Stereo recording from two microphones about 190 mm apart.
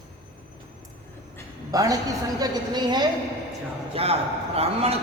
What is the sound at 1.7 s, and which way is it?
A man's voice, 20° right (ahead or behind).